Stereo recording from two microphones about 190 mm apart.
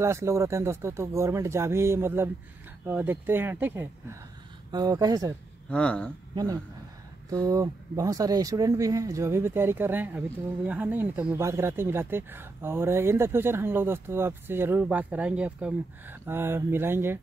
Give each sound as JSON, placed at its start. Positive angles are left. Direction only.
{"t": 0.0, "sound": "speech", "side_deg": -15}
{"t": 5.7, "sound": "speech", "side_deg": 5}
{"t": 6.3, "sound": "speech", "side_deg": -20}